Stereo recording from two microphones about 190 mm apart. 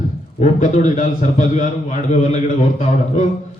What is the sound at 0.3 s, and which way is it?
A man's voice, 40° left (ahead or behind).